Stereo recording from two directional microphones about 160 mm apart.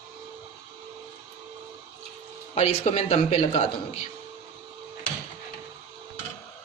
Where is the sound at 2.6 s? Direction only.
45° left (ahead or behind).